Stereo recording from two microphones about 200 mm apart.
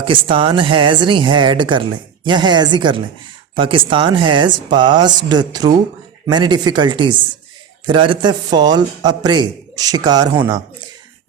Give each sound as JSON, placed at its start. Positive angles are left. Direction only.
{"t": 0.0, "sound": "speech", "side_deg": -25}